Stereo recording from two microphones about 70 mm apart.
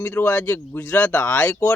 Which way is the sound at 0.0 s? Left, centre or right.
Left.